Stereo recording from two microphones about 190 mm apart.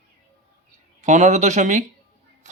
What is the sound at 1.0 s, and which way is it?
Speech, 40° right (ahead or behind).